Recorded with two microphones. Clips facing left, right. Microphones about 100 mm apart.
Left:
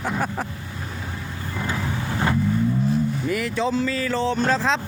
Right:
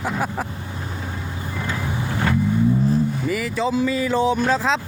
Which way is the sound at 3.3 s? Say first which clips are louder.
Right 1 dB; centre (ahead or behind).